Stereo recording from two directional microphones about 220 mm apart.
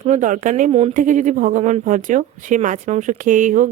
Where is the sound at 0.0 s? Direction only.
35° right (ahead or behind).